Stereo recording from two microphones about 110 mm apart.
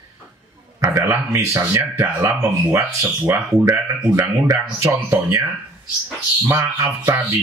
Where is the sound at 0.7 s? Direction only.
30° right (ahead or behind).